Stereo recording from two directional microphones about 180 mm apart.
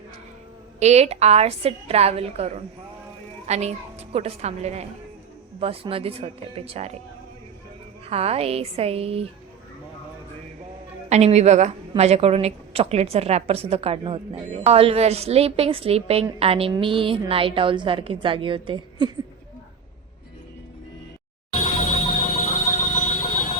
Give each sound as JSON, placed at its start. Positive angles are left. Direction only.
{"t": 0.8, "sound": "a woman's voice", "side_deg": -35}
{"t": 8.1, "sound": "a woman's voice", "side_deg": -35}
{"t": 11.1, "sound": "a woman's voice", "side_deg": -35}
{"t": 21.6, "sound": "music", "side_deg": 45}